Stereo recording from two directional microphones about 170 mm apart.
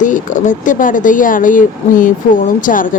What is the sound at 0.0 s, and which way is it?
Speech, 50° left (ahead or behind).